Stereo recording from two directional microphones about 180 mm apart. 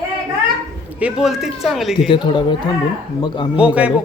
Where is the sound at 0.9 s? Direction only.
5° right (ahead or behind).